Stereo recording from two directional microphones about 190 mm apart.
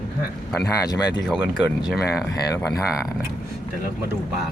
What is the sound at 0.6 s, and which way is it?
Speech, 20° left (ahead or behind).